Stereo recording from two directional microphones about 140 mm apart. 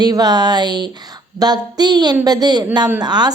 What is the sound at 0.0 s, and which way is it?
A woman's voice, 30° right (ahead or behind).